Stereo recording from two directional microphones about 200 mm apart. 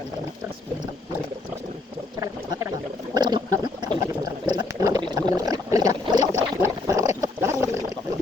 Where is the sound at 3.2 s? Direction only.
20° right (ahead or behind).